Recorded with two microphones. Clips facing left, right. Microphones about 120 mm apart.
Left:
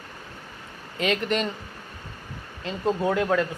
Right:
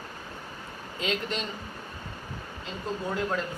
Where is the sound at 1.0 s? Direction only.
65° left (ahead or behind).